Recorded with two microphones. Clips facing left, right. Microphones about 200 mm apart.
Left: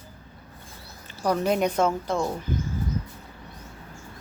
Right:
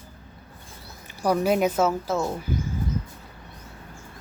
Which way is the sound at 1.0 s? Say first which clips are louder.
Right 2 dB; 10° right (ahead or behind).